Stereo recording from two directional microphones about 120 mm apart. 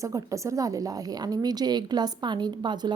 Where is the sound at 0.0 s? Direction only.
25° right (ahead or behind).